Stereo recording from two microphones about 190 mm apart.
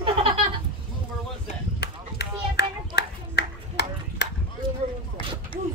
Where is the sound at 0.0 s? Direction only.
30° right (ahead or behind).